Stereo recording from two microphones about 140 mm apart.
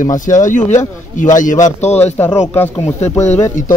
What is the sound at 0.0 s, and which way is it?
Speech, 65° left (ahead or behind).